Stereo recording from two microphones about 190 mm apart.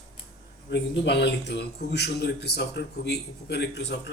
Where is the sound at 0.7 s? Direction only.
65° left (ahead or behind).